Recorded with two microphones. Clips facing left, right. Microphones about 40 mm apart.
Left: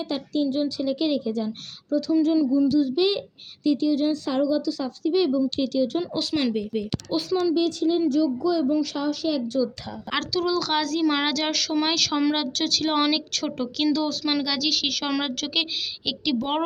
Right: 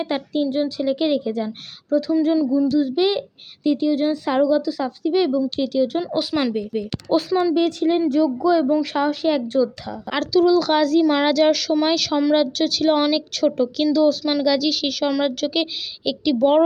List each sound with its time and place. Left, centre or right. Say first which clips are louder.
0.0 s a woman's voice: right 3 dB; right
2.6 s speech: right 2 dB; centre
4.3 s a woman's voice: right 5 dB; right; by 6.8 s centre
7.1 s a woman's voice: right 6 dB; right
7.5 s a woman's voice: right 4 dB; right
10.1 s speech: right 8 dB; centre
11.0 s speech: right 7 dB; centre